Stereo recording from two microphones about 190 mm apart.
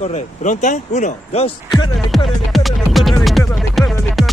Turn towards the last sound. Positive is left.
turn(degrees=0)  # may be behind; listen again after turning